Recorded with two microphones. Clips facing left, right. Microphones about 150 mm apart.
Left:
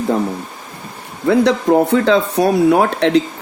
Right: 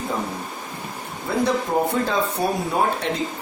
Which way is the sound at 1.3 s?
85° left.